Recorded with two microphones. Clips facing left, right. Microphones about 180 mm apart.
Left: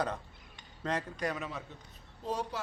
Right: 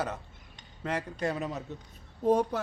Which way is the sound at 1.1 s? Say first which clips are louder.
Right 4 dB; 30° right (ahead or behind).